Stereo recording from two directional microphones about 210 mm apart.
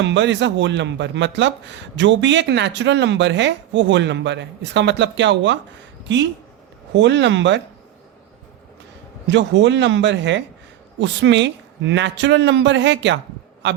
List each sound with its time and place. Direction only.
0.0 s speech: 60° right (ahead or behind)
6.9 s speech: 60° right (ahead or behind)
9.2 s speech: 60° right (ahead or behind)